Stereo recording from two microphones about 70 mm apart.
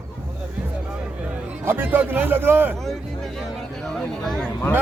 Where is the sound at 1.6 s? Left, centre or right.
Right.